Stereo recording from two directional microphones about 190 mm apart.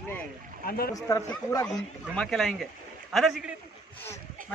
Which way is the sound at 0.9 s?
15° left (ahead or behind).